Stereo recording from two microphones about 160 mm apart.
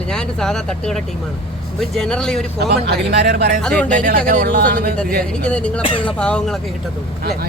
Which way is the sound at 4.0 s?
65° right (ahead or behind).